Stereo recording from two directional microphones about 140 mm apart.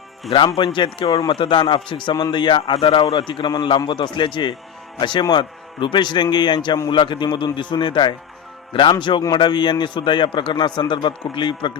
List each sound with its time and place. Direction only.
0.3 s a man's voice: 40° left (ahead or behind)